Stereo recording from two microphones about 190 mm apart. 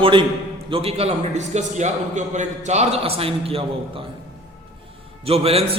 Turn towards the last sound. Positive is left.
turn(degrees=-30)  # may be behind; listen again after turning